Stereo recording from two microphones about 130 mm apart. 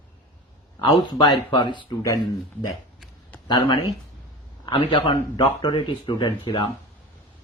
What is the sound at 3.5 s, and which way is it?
Speech, 35° left (ahead or behind).